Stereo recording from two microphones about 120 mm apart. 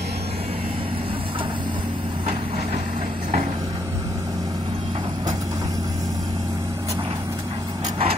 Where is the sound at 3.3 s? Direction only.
90° right.